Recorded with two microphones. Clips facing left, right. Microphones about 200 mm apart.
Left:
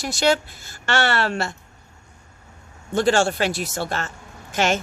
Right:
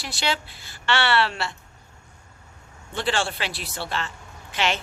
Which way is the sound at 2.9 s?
45° left (ahead or behind).